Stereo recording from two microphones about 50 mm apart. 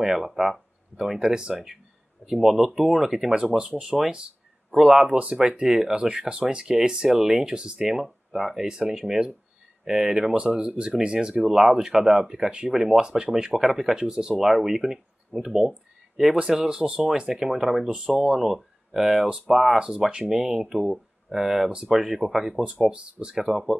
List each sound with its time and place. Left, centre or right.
0.0 s speech: centre
1.2 s speech: centre
2.3 s speech: centre
3.4 s speech: right
3.8 s speech: centre
5.1 s speech: right
11.4 s speech: centre
17.3 s speech: centre
17.8 s speech: centre
18.1 s speech: centre
19.8 s speech: centre
22.6 s speech: centre